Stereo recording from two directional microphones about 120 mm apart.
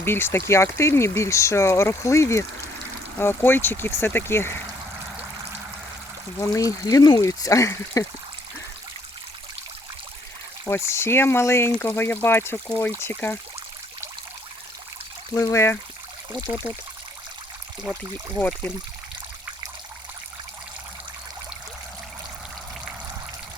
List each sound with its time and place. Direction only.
0.0 s speech: 20° left (ahead or behind)
6.4 s speech: 30° left (ahead or behind)
10.7 s speech: 20° left (ahead or behind)
15.4 s speech: 25° left (ahead or behind)
16.7 s speech: 15° right (ahead or behind)
18.3 s speech: 10° left (ahead or behind)